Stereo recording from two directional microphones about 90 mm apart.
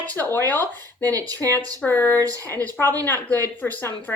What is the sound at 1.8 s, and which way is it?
Speech, 20° left (ahead or behind).